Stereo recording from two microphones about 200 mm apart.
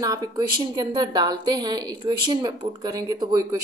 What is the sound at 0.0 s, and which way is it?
A woman's voice, 20° right (ahead or behind).